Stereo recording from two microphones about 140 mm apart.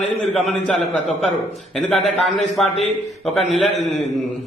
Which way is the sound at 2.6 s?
5° left (ahead or behind).